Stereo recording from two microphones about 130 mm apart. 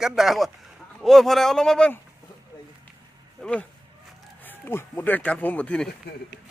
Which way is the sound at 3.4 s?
10° left (ahead or behind).